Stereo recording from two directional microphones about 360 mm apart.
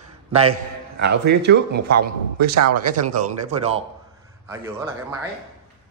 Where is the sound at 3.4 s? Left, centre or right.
Centre.